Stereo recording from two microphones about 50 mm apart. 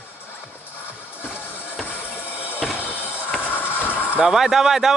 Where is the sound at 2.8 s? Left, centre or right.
Right.